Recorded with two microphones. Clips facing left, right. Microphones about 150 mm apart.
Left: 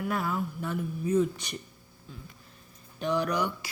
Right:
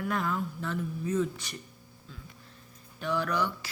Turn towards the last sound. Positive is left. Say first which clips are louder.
# left 1 dB
turn(degrees=15)  # may be behind; listen again after turning